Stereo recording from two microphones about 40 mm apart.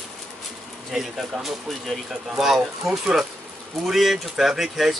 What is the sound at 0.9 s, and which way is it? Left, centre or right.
Speech, centre.